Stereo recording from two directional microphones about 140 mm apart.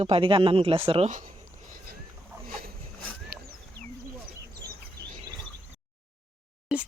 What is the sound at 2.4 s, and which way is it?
Boat, 90° right.